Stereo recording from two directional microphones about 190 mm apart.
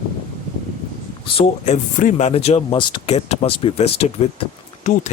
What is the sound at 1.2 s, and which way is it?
Speech, 30° left (ahead or behind).